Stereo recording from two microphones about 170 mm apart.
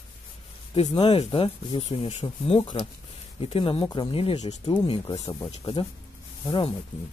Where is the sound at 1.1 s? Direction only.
35° left (ahead or behind).